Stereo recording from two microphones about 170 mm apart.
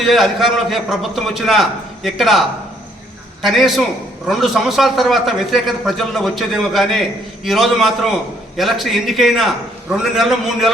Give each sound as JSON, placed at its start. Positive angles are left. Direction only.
{"t": 0.0, "sound": "a man's voice", "side_deg": 0}
{"t": 3.4, "sound": "a man's voice", "side_deg": 0}